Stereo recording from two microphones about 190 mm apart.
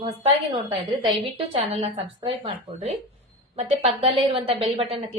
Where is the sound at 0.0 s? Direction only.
30° right (ahead or behind).